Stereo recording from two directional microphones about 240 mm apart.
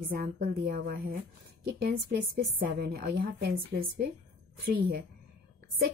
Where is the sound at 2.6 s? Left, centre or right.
Right.